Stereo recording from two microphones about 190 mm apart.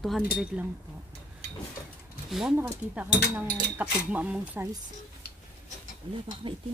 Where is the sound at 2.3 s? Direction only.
5° right (ahead or behind).